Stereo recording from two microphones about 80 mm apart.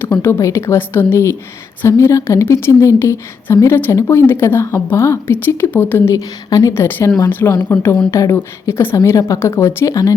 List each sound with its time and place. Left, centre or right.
0.2 s speech: left
6.5 s a woman's voice: left
6.7 s speech: left
8.1 s a woman's voice: left